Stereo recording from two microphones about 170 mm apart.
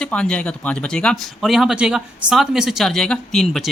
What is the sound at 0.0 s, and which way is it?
Speech, 5° left (ahead or behind).